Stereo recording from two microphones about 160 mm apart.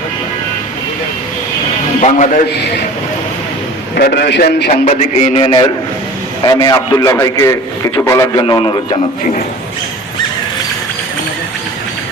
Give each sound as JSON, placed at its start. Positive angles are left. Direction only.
{"t": 2.0, "sound": "a man's voice", "side_deg": 50}
{"t": 3.9, "sound": "a man's voice", "side_deg": 85}
{"t": 4.7, "sound": "a man's voice", "side_deg": 45}